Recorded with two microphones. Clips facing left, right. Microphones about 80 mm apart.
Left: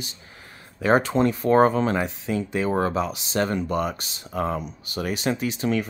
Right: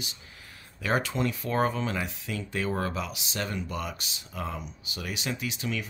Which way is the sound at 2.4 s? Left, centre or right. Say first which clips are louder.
Left 7 dB; left.